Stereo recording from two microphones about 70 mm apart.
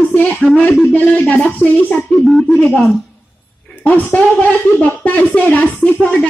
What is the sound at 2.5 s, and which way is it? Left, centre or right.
Speech, left.